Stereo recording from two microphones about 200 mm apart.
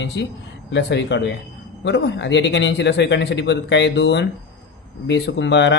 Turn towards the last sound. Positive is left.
turn(degrees=60)  # may be behind; listen again after turning